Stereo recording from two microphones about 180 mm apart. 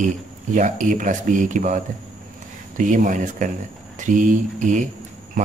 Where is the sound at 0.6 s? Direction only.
45° right (ahead or behind).